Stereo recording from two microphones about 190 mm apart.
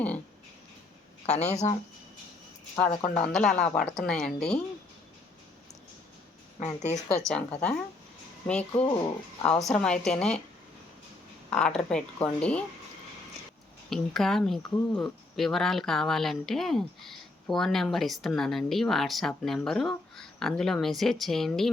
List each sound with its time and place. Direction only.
1.3 s speech: 35° left (ahead or behind)
2.7 s speech: 15° left (ahead or behind)
7.3 s speech: 5° left (ahead or behind)
8.7 s speech: 30° left (ahead or behind)
9.4 s speech: 5° left (ahead or behind)
11.5 s speech: 5° left (ahead or behind)
13.9 s speech: centre (ahead or behind)